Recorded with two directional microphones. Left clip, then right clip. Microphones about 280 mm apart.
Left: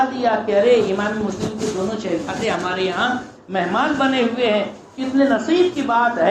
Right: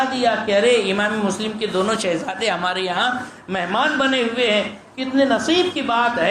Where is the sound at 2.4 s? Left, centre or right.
Right.